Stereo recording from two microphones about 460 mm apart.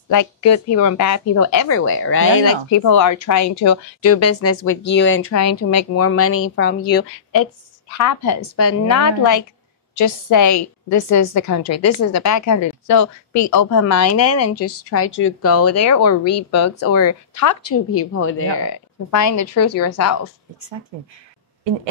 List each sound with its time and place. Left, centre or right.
0.1 s a woman's voice: left
2.7 s a woman's voice: left
7.9 s a woman's voice: left
19.0 s a woman's voice: left